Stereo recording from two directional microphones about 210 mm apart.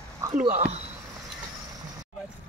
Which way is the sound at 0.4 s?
30° right (ahead or behind).